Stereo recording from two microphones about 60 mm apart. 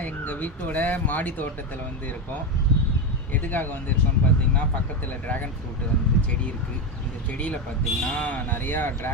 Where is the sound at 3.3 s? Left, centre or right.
Left.